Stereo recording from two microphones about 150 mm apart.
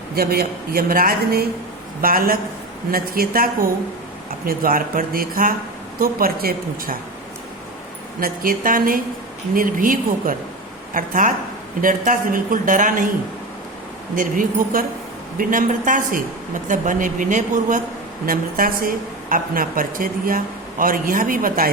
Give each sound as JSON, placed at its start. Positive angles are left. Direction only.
{"t": 0.2, "sound": "a woman's voice", "side_deg": -90}
{"t": 8.2, "sound": "a woman's voice", "side_deg": -70}
{"t": 14.2, "sound": "a woman's voice", "side_deg": -65}
{"t": 18.3, "sound": "a woman's voice", "side_deg": -70}